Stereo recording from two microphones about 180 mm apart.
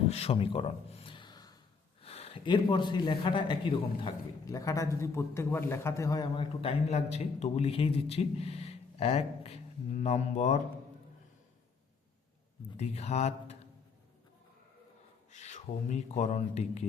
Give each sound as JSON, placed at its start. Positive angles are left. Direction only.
{"t": 0.1, "sound": "speech", "side_deg": 35}
{"t": 1.0, "sound": "a sound", "side_deg": 25}
{"t": 2.0, "sound": "a man's voice", "side_deg": 35}
{"t": 12.7, "sound": "speech", "side_deg": 35}
{"t": 15.3, "sound": "speech", "side_deg": 40}